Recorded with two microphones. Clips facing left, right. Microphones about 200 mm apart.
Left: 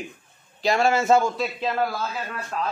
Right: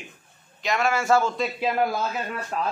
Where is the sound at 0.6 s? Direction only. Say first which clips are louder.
Left 3 dB; 30° left (ahead or behind).